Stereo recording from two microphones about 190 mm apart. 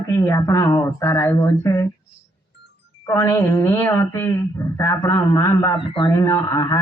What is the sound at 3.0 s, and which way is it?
A woman's voice, 15° left (ahead or behind).